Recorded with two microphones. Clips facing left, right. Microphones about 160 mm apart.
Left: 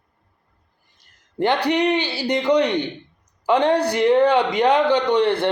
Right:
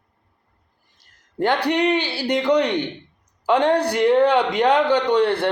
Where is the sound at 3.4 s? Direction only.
10° left (ahead or behind).